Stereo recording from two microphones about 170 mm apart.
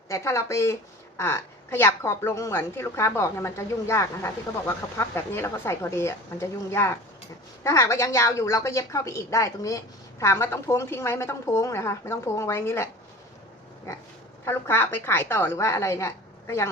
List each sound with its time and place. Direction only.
0.1 s a woman's voice: 15° left (ahead or behind)
14.4 s a woman's voice: 15° left (ahead or behind)